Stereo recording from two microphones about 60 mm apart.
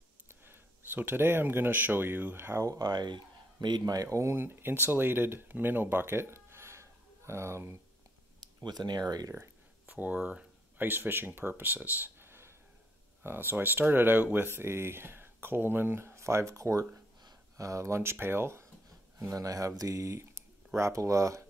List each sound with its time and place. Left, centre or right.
0.3 s speech: right
2.6 s speech: right
3.8 s speech: right
4.4 s speech: right
5.5 s a sound: right
9.0 s speech: right
9.8 s speech: right
10.8 s speech: right
18.1 s speech: right
19.1 s speech: right